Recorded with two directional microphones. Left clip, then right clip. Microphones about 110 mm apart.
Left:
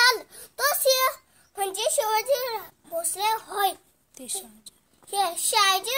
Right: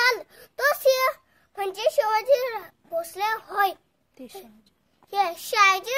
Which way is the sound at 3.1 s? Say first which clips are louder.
Right 1 dB; 35° right (ahead or behind).